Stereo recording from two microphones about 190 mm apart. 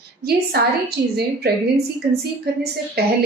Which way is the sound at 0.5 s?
55° right (ahead or behind).